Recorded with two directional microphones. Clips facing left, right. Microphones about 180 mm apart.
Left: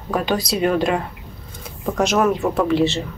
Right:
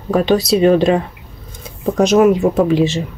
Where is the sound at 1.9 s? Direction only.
15° right (ahead or behind).